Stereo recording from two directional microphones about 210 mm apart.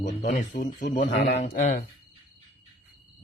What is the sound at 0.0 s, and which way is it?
Speech, 35° left (ahead or behind).